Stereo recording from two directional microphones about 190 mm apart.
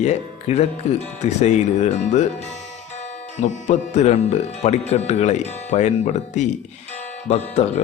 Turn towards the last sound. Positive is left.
turn(degrees=35)  # may be behind; listen again after turning